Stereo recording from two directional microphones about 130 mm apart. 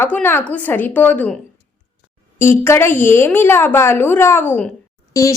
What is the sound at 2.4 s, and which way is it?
A woman's voice, 20° left (ahead or behind).